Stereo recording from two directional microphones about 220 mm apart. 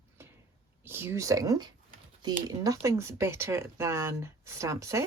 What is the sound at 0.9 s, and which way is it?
Speech, 10° right (ahead or behind).